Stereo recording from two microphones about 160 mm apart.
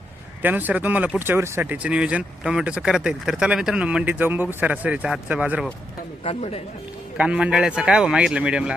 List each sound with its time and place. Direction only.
0.4 s speech: 10° right (ahead or behind)
6.2 s speech: 40° left (ahead or behind)
7.2 s a man's voice: 5° right (ahead or behind)